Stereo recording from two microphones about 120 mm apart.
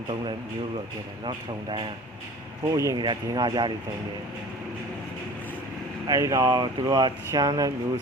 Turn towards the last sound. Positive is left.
turn(degrees=-30)  # may be behind; listen again after turning